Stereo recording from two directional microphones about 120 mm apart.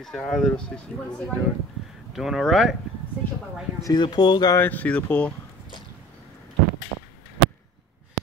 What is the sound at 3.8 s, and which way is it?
Speech, 40° left (ahead or behind).